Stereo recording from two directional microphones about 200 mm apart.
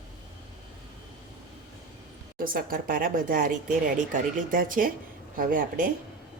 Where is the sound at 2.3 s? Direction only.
45° right (ahead or behind).